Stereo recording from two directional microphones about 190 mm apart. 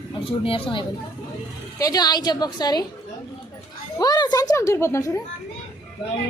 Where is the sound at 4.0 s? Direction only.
20° left (ahead or behind).